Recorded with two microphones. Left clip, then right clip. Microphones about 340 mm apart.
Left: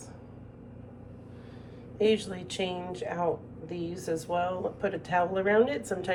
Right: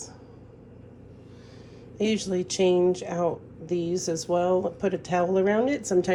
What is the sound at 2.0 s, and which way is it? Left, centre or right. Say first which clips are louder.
Speech: even; centre.